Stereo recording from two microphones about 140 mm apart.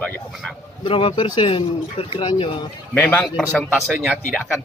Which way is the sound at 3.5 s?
Centre (ahead or behind).